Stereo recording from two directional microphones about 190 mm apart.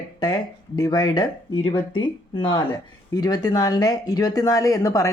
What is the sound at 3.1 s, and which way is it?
Speech, 20° left (ahead or behind).